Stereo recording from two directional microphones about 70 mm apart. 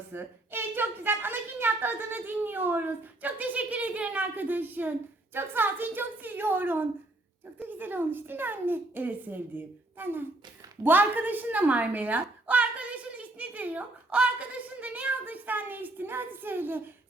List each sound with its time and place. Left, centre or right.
0.1 s a woman's voice: right